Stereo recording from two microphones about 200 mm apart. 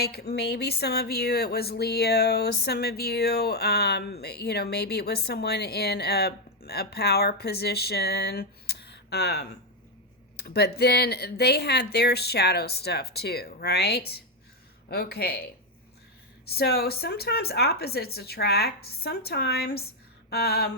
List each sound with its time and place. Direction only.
0.0 s speech: 50° left (ahead or behind)
16.5 s speech: 50° left (ahead or behind)